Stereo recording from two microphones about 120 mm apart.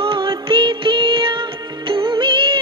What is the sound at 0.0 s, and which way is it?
Music, 45° right (ahead or behind).